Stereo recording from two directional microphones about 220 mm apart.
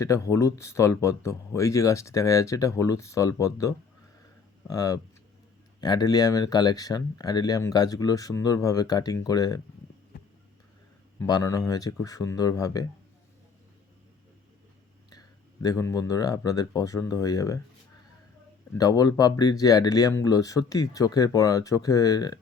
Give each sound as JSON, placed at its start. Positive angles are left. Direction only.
{"t": 0.0, "sound": "speech", "side_deg": 15}
{"t": 11.2, "sound": "speech", "side_deg": 15}
{"t": 15.6, "sound": "speech", "side_deg": 15}
{"t": 18.7, "sound": "speech", "side_deg": 15}